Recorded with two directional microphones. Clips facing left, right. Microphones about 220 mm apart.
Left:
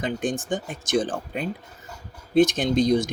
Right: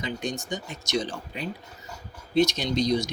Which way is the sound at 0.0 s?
50° left (ahead or behind).